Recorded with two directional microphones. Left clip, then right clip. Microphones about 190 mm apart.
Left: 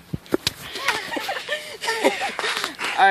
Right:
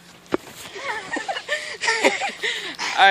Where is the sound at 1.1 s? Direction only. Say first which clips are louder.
Even; 40° right (ahead or behind).